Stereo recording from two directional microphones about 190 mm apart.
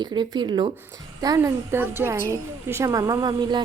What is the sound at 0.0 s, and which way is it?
A woman's voice, 25° right (ahead or behind).